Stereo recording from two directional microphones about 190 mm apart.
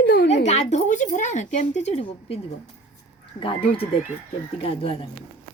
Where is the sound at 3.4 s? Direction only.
30° left (ahead or behind).